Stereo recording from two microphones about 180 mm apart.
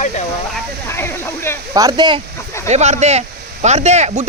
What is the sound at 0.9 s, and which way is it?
Speech, 15° left (ahead or behind).